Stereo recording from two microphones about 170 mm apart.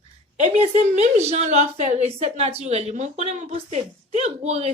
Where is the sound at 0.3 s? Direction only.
40° right (ahead or behind).